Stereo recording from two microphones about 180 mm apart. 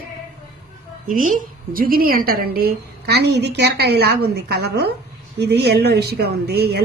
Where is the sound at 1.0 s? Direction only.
45° right (ahead or behind).